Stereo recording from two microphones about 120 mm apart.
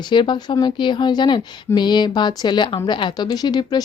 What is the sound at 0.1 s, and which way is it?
Speech, 40° left (ahead or behind).